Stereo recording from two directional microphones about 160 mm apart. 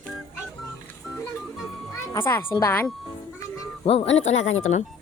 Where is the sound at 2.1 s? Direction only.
15° left (ahead or behind).